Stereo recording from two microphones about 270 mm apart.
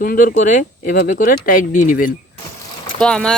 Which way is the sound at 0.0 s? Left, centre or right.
Left.